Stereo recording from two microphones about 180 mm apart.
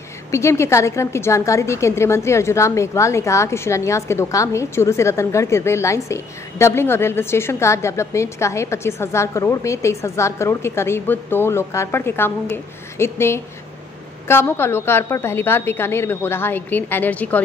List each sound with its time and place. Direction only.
0.3 s a woman's voice: 15° left (ahead or behind)